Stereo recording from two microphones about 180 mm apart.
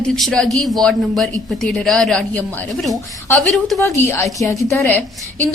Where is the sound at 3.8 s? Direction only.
15° left (ahead or behind).